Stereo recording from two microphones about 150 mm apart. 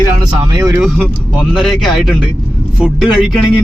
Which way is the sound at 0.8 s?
Centre (ahead or behind).